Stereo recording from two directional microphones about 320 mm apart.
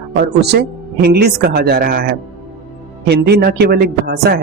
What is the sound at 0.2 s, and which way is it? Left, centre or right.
Speech, right.